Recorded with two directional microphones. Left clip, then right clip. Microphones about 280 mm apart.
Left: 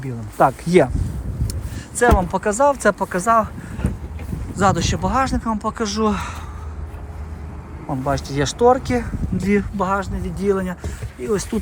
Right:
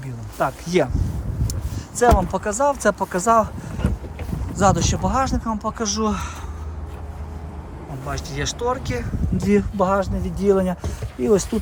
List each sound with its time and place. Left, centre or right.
0.0 s speech: centre
1.5 s a sound: centre
2.1 s speech: centre
4.5 s speech: centre
8.0 s speech: centre
9.4 s speech: centre